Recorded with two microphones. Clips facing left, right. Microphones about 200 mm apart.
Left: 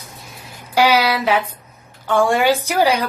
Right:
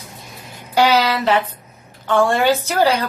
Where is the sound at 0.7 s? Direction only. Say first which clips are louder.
Even; 10° left (ahead or behind).